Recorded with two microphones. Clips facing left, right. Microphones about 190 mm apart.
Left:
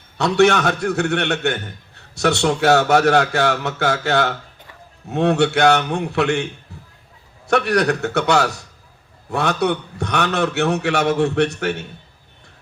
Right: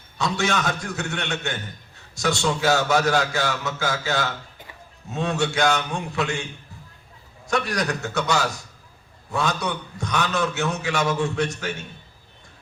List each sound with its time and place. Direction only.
0.2 s a man's voice: 65° left (ahead or behind)